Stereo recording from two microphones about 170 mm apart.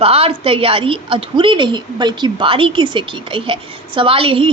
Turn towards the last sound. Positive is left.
turn(degrees=-30)  # may be behind; listen again after turning